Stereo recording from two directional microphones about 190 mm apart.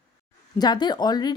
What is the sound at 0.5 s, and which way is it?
Speech, 20° left (ahead or behind).